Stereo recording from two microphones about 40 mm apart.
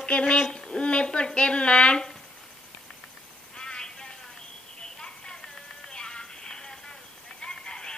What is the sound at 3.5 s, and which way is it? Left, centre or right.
Telephone, centre.